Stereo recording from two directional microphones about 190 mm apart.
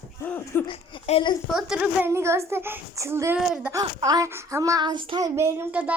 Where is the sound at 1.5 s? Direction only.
5° right (ahead or behind).